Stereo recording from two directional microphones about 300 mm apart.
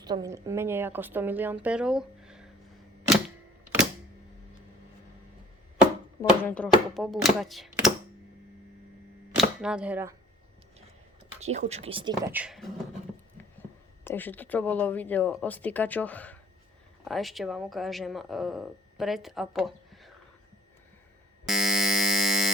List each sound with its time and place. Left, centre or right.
0.0 s a woman's voice: centre
6.4 s speech: centre
9.3 s speech: centre
11.3 s a woman's voice: right; by 12.7 s centre
14.0 s speech: centre
21.4 s fire alarm: centre